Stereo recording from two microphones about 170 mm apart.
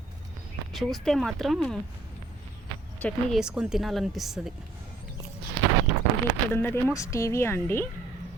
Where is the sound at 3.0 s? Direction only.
Centre (ahead or behind).